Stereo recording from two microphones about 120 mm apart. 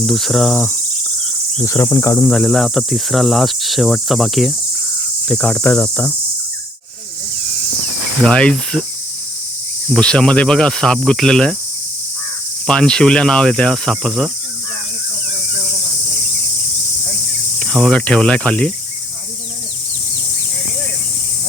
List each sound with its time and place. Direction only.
0.0 s cricket: centre (ahead or behind)
1.6 s cricket: 25° left (ahead or behind)
2.3 s cricket: 5° left (ahead or behind)
5.2 s speech: 10° left (ahead or behind)
8.2 s speech: 10° left (ahead or behind)
9.9 s speech: 5° left (ahead or behind)
12.6 s cricket: 5° left (ahead or behind)
17.6 s speech: 5° left (ahead or behind)